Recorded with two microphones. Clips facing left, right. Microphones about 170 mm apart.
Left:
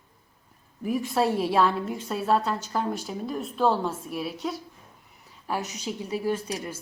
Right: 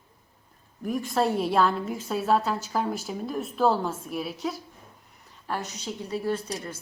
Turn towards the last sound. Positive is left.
turn(degrees=10)  # may be behind; listen again after turning